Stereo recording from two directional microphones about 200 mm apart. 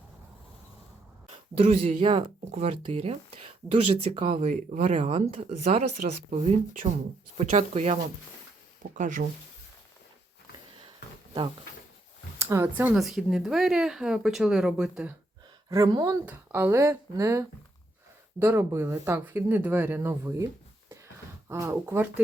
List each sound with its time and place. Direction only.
1.5 s speech: 30° right (ahead or behind)
4.4 s speech: 40° right (ahead or behind)
9.0 s speech: 40° right (ahead or behind)
12.4 s speech: 15° right (ahead or behind)
15.7 s speech: 20° right (ahead or behind)
21.5 s speech: 15° right (ahead or behind)